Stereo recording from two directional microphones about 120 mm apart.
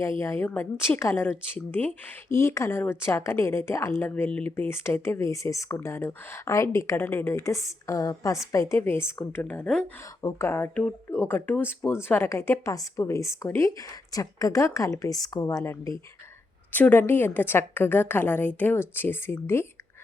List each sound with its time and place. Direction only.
0.2 s a woman's voice: 20° left (ahead or behind)
10.2 s a woman's voice: 25° left (ahead or behind)